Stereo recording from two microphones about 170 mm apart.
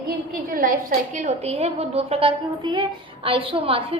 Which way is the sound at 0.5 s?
55° right (ahead or behind).